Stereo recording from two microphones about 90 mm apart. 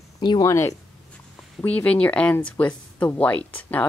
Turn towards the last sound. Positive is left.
turn(degrees=15)  # may be behind; listen again after turning